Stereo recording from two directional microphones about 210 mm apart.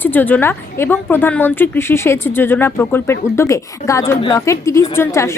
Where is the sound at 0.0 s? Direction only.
10° left (ahead or behind).